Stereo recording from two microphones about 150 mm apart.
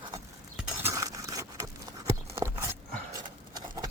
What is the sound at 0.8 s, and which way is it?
Zipper, 20° right (ahead or behind).